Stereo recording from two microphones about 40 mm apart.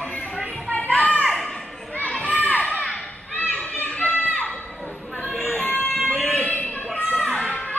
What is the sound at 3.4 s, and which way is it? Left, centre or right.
Children playing, left.